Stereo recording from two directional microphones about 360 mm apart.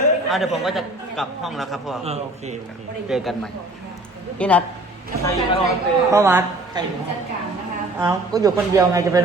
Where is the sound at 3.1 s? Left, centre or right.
Centre.